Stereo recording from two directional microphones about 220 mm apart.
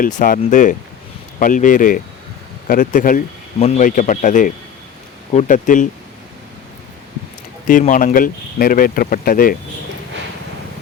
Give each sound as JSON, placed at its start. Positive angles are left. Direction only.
{"t": 0.2, "sound": "speech", "side_deg": 35}
{"t": 7.7, "sound": "speech", "side_deg": 35}